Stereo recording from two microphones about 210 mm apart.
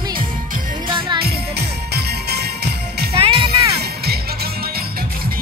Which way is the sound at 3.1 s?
25° right (ahead or behind).